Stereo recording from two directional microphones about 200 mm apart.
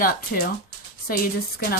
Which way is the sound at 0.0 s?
45° left (ahead or behind).